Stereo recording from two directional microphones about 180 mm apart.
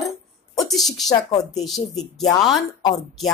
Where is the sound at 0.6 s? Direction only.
Centre (ahead or behind).